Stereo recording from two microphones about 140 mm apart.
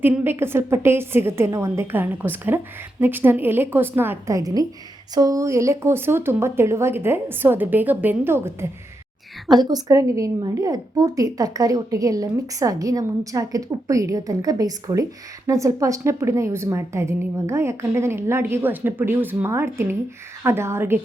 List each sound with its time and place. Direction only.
0.0 s speech: 15° right (ahead or behind)
9.5 s a woman's voice: 30° right (ahead or behind)